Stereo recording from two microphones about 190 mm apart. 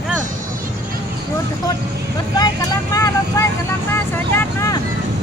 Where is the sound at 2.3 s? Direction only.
20° left (ahead or behind).